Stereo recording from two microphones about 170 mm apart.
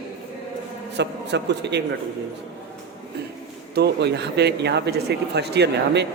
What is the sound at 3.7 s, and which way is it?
Speech, 80° right.